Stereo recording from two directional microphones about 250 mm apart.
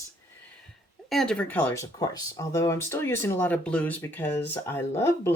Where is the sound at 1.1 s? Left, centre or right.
Centre.